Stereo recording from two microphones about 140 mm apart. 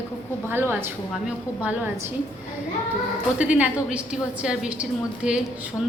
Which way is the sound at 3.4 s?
10° right (ahead or behind).